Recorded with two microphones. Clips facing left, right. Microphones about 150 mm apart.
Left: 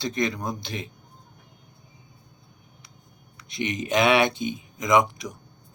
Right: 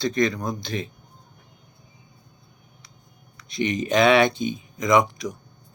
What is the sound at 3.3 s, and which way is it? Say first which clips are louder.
Speech: right 4 dB; 10° left (ahead or behind).